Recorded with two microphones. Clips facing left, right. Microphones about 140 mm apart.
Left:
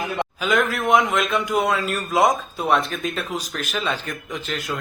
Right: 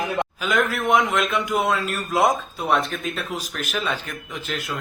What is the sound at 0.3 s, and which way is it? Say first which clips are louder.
A man's voice: left 3 dB; centre (ahead or behind).